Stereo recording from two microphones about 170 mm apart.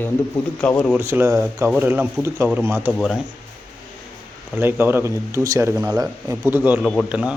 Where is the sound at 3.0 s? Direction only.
Centre (ahead or behind).